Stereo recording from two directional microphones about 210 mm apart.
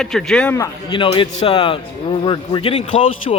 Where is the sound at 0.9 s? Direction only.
25° left (ahead or behind).